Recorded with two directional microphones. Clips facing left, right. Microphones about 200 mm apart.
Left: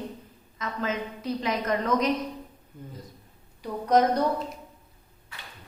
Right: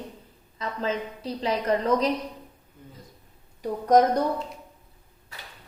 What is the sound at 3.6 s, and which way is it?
Speech, 45° right (ahead or behind).